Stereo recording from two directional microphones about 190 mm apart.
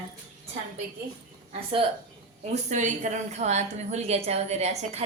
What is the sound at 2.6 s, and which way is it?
A woman's voice, 40° right (ahead or behind).